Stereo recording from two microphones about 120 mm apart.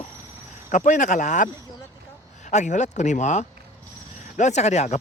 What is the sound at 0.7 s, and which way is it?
Speech, 90° left.